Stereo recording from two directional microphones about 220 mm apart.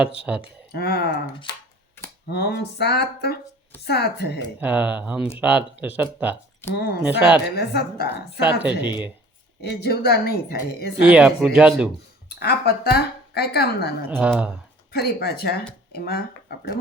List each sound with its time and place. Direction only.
0.2 s speech: 5° right (ahead or behind)
0.7 s speech: 45° left (ahead or behind)
2.3 s speech: 45° left (ahead or behind)
4.6 s speech: 5° right (ahead or behind)
6.7 s speech: 45° left (ahead or behind)
7.0 s speech: 5° right (ahead or behind)
7.5 s speech: 45° left (ahead or behind)
8.4 s speech: 5° right (ahead or behind)
9.6 s speech: 45° left (ahead or behind)
11.0 s speech: 5° right (ahead or behind)
12.3 s speech: 45° left (ahead or behind)
14.1 s speech: 5° right (ahead or behind)
14.9 s speech: 45° left (ahead or behind)